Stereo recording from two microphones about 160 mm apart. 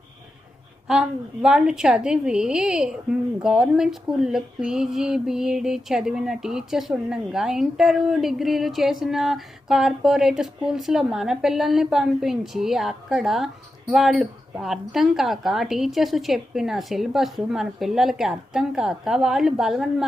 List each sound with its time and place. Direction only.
0.9 s a woman's voice: 5° right (ahead or behind)